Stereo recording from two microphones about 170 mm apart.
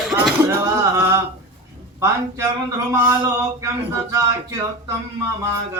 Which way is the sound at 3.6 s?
15° right (ahead or behind).